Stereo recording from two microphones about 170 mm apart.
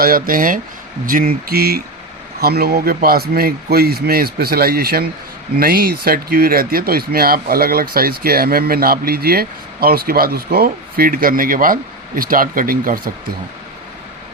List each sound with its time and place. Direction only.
0.0 s speech: 55° right (ahead or behind)